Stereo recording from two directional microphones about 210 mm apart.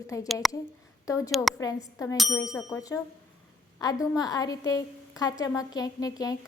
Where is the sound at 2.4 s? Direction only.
15° left (ahead or behind).